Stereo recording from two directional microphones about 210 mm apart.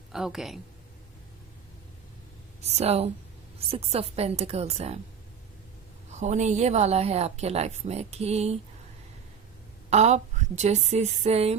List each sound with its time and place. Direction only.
0.1 s speech: centre (ahead or behind)
2.6 s a woman's voice: 30° right (ahead or behind)
6.1 s a woman's voice: 35° right (ahead or behind)
9.9 s a woman's voice: 35° right (ahead or behind)